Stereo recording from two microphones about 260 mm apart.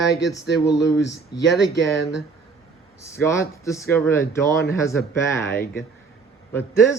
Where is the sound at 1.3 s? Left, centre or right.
Centre.